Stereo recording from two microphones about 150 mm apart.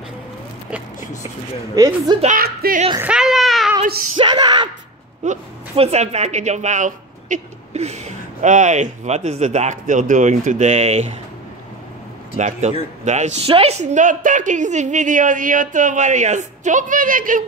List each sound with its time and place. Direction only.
2.2 s speech: 75° right (ahead or behind)
3.0 s a sound: 5° right (ahead or behind)
4.2 s speech: 30° right (ahead or behind)
5.2 s a woman's voice: 50° right (ahead or behind)
12.4 s a woman's voice: 50° right (ahead or behind)